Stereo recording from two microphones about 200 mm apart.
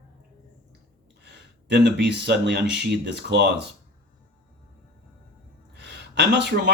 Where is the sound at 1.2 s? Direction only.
60° right (ahead or behind).